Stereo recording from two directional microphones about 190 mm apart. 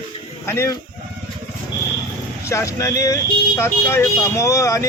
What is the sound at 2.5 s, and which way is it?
Speech, 15° left (ahead or behind).